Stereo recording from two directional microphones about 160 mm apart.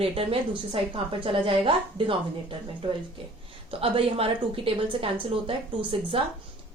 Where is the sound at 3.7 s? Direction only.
35° right (ahead or behind).